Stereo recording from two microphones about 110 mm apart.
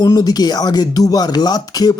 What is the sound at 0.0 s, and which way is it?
Speech, 35° left (ahead or behind).